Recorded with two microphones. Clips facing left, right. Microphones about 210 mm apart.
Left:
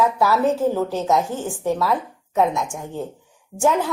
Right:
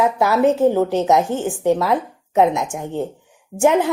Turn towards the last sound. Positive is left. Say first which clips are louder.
# right 4 dB
turn(degrees=-20)  # may be behind; listen again after turning